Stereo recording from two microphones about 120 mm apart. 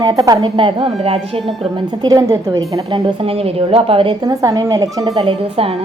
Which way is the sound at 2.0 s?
30° right (ahead or behind).